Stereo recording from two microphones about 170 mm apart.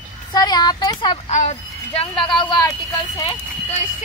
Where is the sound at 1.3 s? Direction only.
45° left (ahead or behind).